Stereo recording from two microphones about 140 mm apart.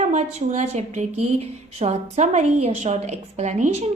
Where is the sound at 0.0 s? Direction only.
50° right (ahead or behind).